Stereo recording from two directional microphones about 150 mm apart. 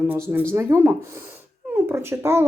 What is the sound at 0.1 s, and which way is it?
Speech, 15° right (ahead or behind).